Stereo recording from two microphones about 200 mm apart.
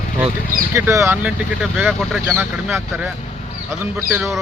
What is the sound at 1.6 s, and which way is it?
Speech, centre (ahead or behind).